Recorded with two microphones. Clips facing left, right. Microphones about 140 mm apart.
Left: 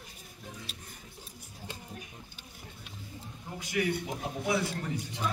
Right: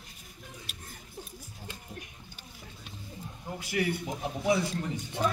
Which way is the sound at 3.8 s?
35° right (ahead or behind).